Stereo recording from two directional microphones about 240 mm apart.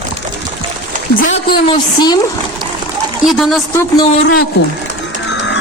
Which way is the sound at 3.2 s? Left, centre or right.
Centre.